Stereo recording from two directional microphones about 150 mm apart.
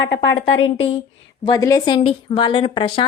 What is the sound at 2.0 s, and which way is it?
A woman's voice, 35° left (ahead or behind).